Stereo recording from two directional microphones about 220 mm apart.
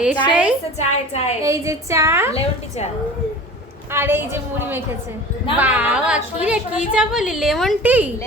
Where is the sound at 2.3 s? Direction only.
30° left (ahead or behind).